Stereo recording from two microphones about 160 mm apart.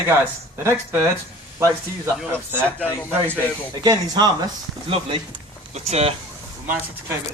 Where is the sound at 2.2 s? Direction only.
15° right (ahead or behind).